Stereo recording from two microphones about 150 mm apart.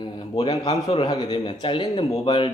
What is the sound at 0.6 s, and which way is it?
A man's voice, 25° left (ahead or behind).